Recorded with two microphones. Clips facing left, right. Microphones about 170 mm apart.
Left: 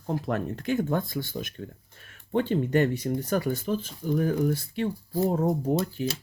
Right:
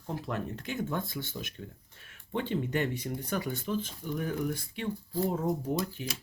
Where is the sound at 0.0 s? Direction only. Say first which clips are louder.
Left 6 dB; 50° left (ahead or behind).